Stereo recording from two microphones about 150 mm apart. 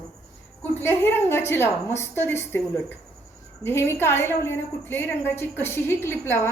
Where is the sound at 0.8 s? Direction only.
15° left (ahead or behind).